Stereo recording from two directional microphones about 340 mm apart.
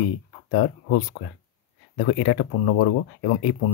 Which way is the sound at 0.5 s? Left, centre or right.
Left.